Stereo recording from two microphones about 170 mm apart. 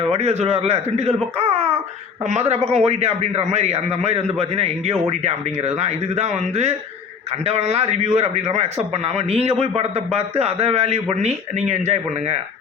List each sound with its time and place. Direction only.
0.1 s a man's voice: 40° right (ahead or behind)